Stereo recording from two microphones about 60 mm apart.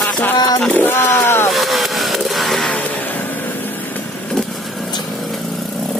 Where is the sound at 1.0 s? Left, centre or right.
Left.